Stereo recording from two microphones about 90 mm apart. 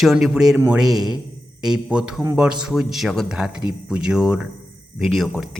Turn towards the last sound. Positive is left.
turn(degrees=0)  # may be behind; listen again after turning